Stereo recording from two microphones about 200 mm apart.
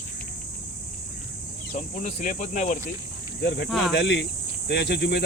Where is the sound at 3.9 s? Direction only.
60° left (ahead or behind).